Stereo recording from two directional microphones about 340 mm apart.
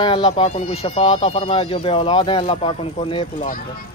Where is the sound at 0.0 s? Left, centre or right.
Centre.